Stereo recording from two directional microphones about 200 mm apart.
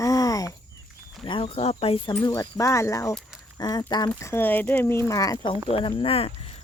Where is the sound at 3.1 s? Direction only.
Centre (ahead or behind).